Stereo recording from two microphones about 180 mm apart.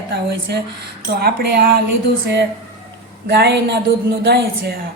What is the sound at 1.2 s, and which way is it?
Speech, 60° right (ahead or behind).